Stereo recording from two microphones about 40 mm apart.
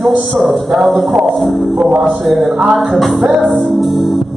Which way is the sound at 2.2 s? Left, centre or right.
Centre.